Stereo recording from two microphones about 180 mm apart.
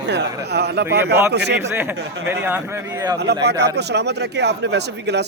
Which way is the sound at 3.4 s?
65° right (ahead or behind).